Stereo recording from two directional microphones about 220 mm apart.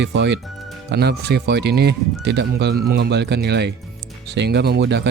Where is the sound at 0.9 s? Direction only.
50° right (ahead or behind).